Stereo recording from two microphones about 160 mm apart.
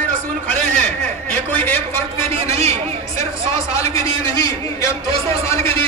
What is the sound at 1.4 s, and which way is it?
Speech, 10° left (ahead or behind).